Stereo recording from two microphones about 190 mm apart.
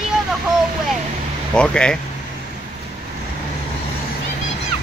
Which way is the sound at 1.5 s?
5° left (ahead or behind).